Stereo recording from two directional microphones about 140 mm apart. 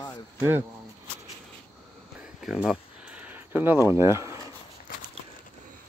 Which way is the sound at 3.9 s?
20° right (ahead or behind).